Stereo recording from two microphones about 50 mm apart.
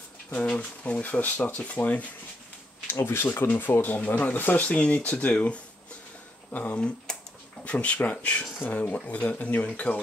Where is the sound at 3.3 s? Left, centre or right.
Left.